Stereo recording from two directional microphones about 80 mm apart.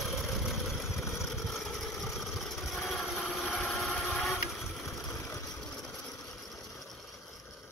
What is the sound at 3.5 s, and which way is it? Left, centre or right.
Vehicle, centre.